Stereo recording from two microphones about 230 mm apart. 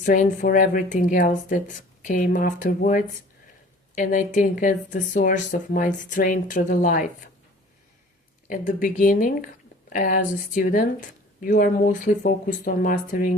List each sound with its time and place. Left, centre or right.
0.0 s speech: left
8.4 s speech: left